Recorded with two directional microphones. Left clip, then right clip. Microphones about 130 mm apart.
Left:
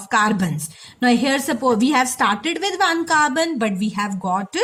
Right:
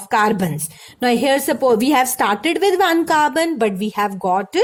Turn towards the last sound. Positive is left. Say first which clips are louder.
# right 4 dB
turn(degrees=-45)  # may be behind; listen again after turning